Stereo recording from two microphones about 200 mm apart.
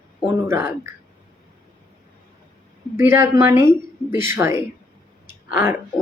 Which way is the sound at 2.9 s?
10° right (ahead or behind).